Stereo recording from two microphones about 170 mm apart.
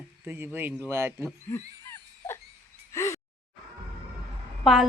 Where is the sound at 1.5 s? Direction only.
15° left (ahead or behind).